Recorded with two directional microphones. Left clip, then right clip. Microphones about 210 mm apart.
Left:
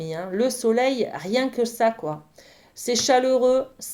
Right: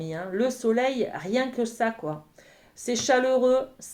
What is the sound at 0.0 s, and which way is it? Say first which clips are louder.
Speech: left 3 dB; 35° left (ahead or behind).